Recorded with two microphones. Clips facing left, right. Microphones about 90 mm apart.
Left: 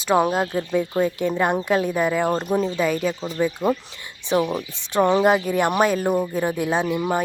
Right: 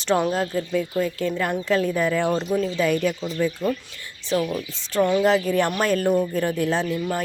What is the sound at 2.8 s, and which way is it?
Speech, 10° left (ahead or behind).